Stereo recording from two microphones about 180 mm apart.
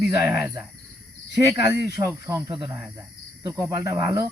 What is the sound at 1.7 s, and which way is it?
Speech, 15° right (ahead or behind).